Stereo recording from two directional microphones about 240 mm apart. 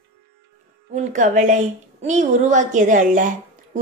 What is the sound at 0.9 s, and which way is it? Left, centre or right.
A woman's voice, right.